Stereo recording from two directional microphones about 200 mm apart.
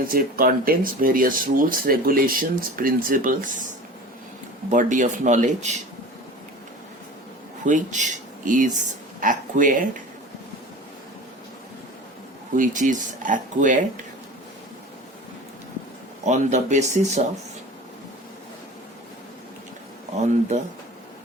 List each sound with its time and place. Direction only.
0.0 s speech: 45° right (ahead or behind)
4.7 s speech: 40° right (ahead or behind)
7.6 s speech: 40° right (ahead or behind)
12.5 s speech: 40° right (ahead or behind)
16.2 s speech: 35° right (ahead or behind)